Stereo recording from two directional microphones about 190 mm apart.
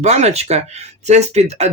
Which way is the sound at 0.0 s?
35° right (ahead or behind).